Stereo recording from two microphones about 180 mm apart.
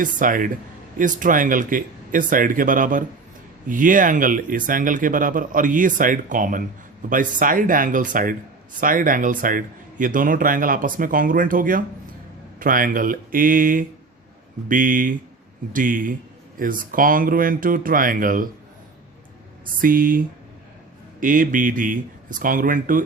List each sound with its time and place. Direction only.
0.0 s speech: 50° right (ahead or behind)
19.6 s speech: 50° right (ahead or behind)